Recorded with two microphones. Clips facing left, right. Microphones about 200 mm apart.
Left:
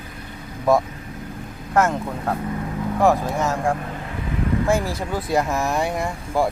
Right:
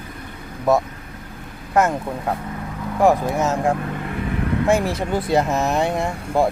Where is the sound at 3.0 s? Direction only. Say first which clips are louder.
Right 2 dB; 15° right (ahead or behind).